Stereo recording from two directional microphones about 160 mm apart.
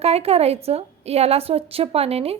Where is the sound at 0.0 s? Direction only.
40° right (ahead or behind).